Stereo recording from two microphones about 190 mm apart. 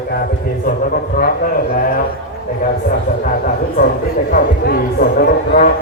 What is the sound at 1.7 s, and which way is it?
Speech, 50° left (ahead or behind).